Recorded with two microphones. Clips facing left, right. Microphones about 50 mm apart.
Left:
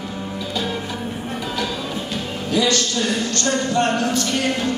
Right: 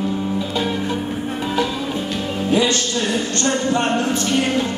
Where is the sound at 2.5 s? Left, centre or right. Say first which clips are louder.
Right 1 dB; right.